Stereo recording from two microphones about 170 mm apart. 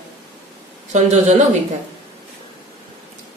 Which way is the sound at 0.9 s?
45° right (ahead or behind).